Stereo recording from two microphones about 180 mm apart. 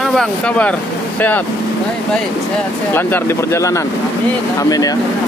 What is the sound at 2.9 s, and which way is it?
Speech, 10° left (ahead or behind).